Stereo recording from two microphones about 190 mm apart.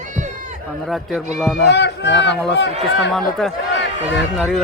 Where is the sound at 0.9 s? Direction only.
Centre (ahead or behind).